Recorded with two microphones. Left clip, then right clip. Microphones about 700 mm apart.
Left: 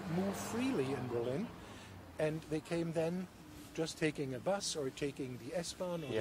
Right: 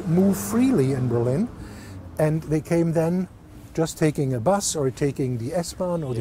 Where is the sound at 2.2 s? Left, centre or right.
Right.